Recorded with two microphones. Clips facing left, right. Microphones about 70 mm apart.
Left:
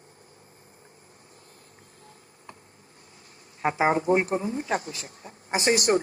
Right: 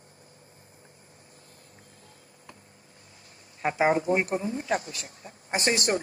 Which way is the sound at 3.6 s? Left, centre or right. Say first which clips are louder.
Left 1 dB; left.